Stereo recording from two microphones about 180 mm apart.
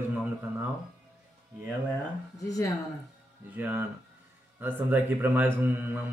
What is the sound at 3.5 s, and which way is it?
Speech, 10° right (ahead or behind).